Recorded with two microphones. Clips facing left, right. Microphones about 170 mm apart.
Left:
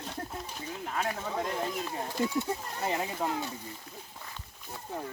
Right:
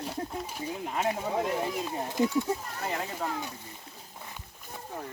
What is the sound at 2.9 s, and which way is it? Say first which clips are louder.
Speech: left 2 dB; 15° left (ahead or behind).